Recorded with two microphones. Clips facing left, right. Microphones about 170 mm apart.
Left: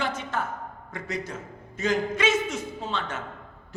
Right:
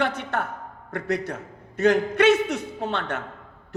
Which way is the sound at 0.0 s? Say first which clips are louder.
Right 4 dB; 65° right (ahead or behind).